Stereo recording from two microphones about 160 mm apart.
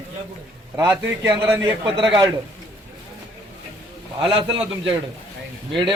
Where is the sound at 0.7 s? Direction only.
15° right (ahead or behind).